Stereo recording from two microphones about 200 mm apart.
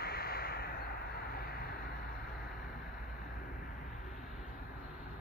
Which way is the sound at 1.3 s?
50° left (ahead or behind).